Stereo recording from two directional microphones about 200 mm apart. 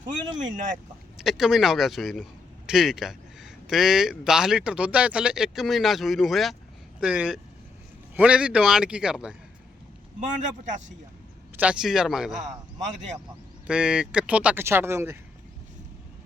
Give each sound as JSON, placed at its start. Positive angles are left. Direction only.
{"t": 1.2, "sound": "speech", "side_deg": 0}
{"t": 10.2, "sound": "speech", "side_deg": -40}
{"t": 11.5, "sound": "speech", "side_deg": -5}
{"t": 12.4, "sound": "speech", "side_deg": -35}
{"t": 13.7, "sound": "speech", "side_deg": -5}